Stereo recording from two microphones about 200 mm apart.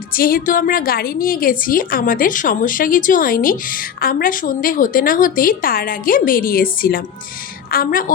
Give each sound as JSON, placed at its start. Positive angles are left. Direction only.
{"t": 0.1, "sound": "a woman's voice", "side_deg": 45}